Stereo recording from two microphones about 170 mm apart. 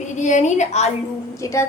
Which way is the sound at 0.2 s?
45° left (ahead or behind).